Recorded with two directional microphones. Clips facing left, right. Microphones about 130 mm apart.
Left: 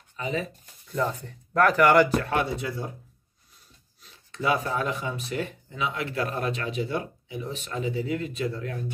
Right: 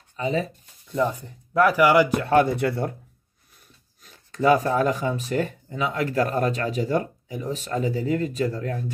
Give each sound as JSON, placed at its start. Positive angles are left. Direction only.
{"t": 0.1, "sound": "speech", "side_deg": -35}
{"t": 0.9, "sound": "speech", "side_deg": -15}
{"t": 2.4, "sound": "speech", "side_deg": -60}
{"t": 4.0, "sound": "speech", "side_deg": -45}